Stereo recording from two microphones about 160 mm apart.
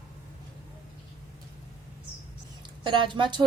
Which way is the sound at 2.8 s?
30° right (ahead or behind).